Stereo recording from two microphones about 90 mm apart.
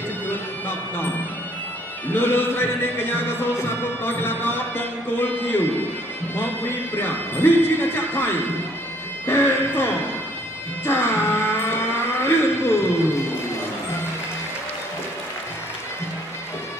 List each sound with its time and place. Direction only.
2.1 s a man's voice: 25° left (ahead or behind)
7.0 s a man's voice: 25° left (ahead or behind)
10.9 s music: 25° left (ahead or behind)